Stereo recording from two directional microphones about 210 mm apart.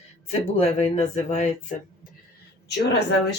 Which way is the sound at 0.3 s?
30° left (ahead or behind).